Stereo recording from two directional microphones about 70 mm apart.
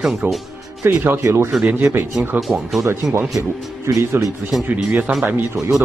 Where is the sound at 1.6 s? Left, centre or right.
Right.